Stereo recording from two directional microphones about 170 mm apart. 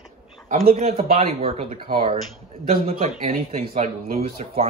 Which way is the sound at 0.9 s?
35° right (ahead or behind).